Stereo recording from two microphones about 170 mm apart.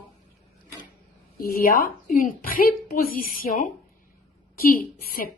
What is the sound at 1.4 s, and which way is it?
A woman's voice, 60° left (ahead or behind).